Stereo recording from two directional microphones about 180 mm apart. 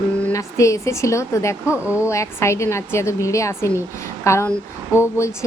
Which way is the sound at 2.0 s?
15° left (ahead or behind).